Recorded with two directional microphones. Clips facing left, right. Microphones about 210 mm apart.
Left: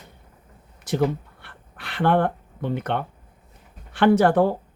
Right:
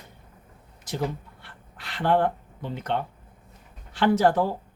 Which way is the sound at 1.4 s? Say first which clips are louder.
Left 3 dB; 60° left (ahead or behind).